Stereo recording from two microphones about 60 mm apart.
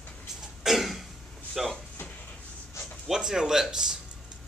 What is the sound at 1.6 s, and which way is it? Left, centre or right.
Speech, centre.